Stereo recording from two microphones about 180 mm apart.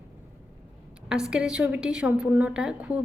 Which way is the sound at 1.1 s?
5° right (ahead or behind).